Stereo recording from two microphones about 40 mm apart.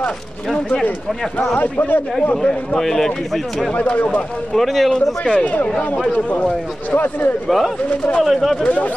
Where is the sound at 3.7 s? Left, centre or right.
Left.